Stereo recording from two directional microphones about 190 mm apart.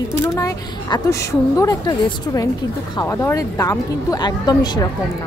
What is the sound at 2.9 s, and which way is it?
Speech, 15° left (ahead or behind).